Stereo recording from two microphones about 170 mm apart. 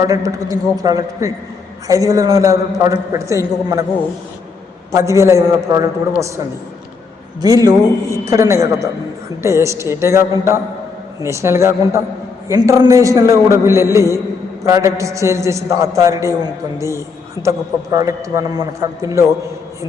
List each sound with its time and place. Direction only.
0.0 s a man's voice: 20° right (ahead or behind)
4.9 s a man's voice: 20° right (ahead or behind)
7.4 s a man's voice: 20° right (ahead or behind)
17.4 s a man's voice: 25° left (ahead or behind)
17.9 s a man's voice: 20° right (ahead or behind)